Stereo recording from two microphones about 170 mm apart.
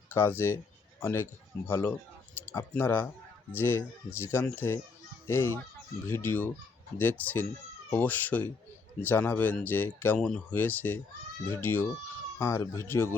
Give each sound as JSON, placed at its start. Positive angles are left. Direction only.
{"t": 0.1, "sound": "speech", "side_deg": 15}